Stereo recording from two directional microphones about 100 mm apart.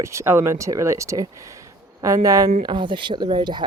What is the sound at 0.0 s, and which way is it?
Speech, 30° right (ahead or behind).